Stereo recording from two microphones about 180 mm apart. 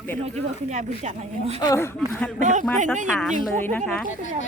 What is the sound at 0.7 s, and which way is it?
Speech, 40° right (ahead or behind).